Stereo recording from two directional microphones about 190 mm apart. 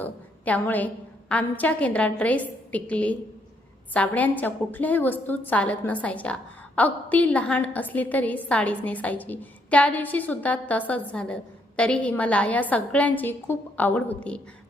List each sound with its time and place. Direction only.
0.0 s a woman's voice: 10° left (ahead or behind)